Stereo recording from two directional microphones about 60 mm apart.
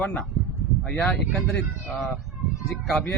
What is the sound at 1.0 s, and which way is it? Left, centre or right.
Speech, centre.